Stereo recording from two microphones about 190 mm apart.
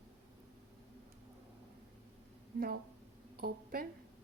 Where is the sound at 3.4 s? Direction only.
50° right (ahead or behind).